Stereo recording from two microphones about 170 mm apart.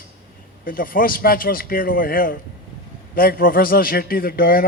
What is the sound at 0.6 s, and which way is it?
A man's voice, 55° left (ahead or behind).